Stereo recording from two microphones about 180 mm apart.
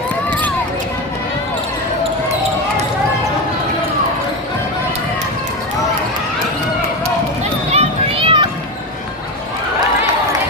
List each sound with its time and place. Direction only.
7.7 s children playing: 35° right (ahead or behind)